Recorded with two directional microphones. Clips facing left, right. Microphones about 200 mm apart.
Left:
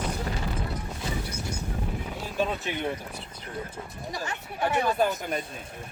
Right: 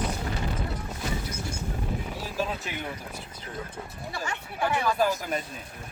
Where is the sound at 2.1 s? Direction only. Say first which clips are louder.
Left 5 dB; 5° right (ahead or behind).